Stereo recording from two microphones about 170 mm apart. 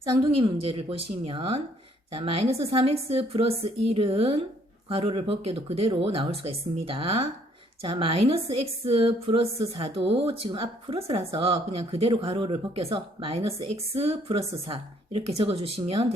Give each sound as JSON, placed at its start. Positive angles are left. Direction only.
{"t": 0.1, "sound": "speech", "side_deg": -30}